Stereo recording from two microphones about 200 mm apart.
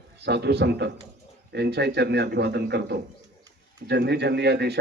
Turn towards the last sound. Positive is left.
turn(degrees=-55)  # may be behind; listen again after turning